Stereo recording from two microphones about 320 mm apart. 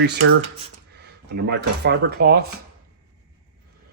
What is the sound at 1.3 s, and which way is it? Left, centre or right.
Speech, right.